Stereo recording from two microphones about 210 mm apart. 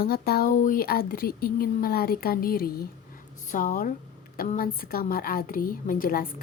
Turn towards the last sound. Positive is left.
turn(degrees=40)  # may be behind; listen again after turning